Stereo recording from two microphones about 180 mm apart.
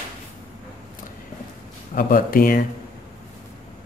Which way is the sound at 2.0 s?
50° left (ahead or behind).